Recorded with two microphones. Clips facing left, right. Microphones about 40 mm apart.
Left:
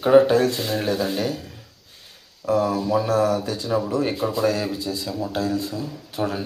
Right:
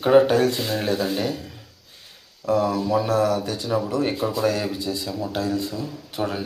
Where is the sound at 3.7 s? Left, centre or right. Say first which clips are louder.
Left 1 dB; centre.